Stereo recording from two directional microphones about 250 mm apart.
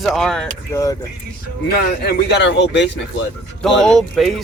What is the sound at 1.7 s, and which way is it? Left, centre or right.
Speech, left.